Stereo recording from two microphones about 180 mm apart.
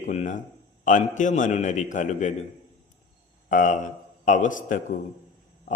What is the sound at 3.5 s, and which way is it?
A man's voice, 45° left (ahead or behind).